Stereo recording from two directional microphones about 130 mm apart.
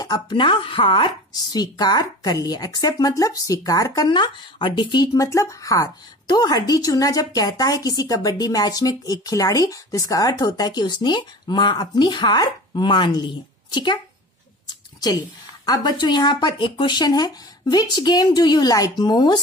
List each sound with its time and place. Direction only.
0.0 s speech: 35° left (ahead or behind)
14.7 s a sound: 30° left (ahead or behind)
15.6 s speech: 30° left (ahead or behind)